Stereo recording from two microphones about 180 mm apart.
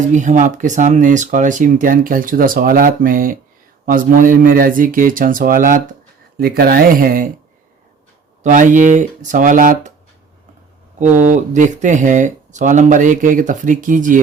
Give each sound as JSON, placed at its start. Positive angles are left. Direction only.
{"t": 0.1, "sound": "speech", "side_deg": -45}
{"t": 8.4, "sound": "speech", "side_deg": -45}
{"t": 11.0, "sound": "speech", "side_deg": -45}